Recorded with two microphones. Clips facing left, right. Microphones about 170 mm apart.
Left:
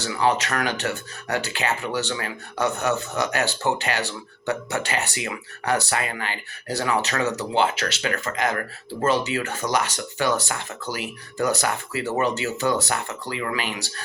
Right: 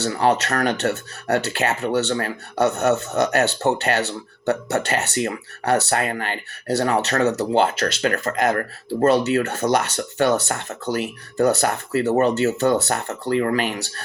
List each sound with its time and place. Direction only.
0.0 s speech: 60° right (ahead or behind)
9.0 s speech: 60° right (ahead or behind)